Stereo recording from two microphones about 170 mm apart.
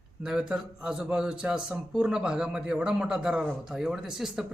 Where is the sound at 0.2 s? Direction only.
5° right (ahead or behind).